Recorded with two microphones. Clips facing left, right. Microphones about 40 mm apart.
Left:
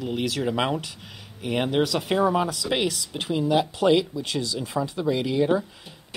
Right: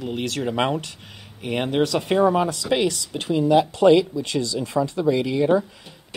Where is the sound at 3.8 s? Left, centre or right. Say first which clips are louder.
Right 5 dB; right.